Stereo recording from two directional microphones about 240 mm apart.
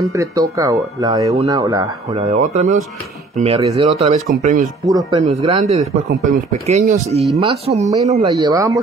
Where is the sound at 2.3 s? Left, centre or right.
Right.